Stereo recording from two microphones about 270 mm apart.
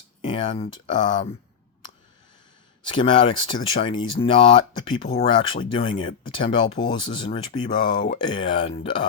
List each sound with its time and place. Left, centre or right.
0.2 s speech: centre
2.8 s speech: centre